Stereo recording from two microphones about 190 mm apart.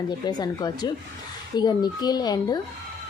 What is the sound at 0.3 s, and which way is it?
A woman's voice, 20° left (ahead or behind).